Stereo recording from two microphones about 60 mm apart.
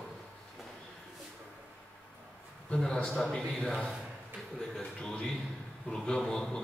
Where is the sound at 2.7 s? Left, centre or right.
Centre.